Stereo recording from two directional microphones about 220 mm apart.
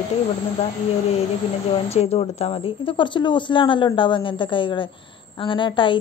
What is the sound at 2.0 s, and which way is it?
A woman's voice, 30° left (ahead or behind).